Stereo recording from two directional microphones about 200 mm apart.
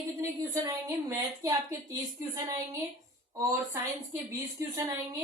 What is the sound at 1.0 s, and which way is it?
Speech, 15° right (ahead or behind).